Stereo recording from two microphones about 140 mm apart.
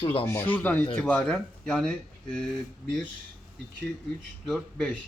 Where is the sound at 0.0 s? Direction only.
40° left (ahead or behind).